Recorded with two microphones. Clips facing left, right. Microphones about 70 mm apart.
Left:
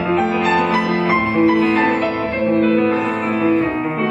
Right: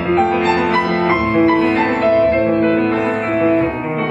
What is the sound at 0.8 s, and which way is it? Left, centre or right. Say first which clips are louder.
Music: right 2 dB; right.